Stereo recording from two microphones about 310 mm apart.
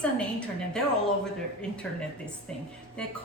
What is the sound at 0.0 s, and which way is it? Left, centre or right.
A woman's voice, centre.